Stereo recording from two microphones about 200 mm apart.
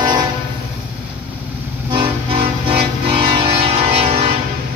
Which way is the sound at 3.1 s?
25° right (ahead or behind).